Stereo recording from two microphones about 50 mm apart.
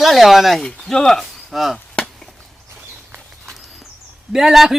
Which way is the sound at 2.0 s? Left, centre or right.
Centre.